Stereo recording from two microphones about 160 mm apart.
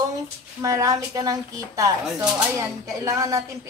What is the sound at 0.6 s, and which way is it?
Speech, 20° right (ahead or behind).